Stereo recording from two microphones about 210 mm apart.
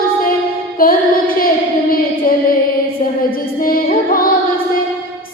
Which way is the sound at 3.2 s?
45° left (ahead or behind).